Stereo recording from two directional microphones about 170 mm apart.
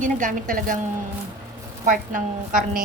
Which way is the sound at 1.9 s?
50° right (ahead or behind).